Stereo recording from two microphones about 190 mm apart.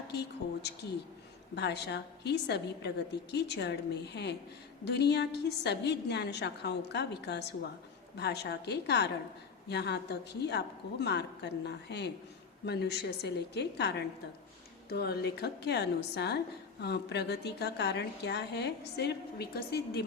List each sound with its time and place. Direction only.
0.1 s a woman's voice: 60° left (ahead or behind)